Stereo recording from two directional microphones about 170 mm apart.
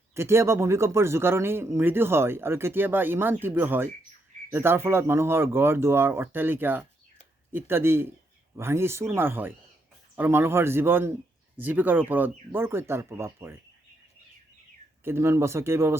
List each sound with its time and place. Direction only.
0.1 s a man's voice: 15° right (ahead or behind)
15.0 s a man's voice: 15° right (ahead or behind)